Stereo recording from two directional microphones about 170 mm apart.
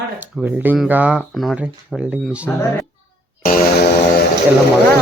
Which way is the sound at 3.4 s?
60° left (ahead or behind).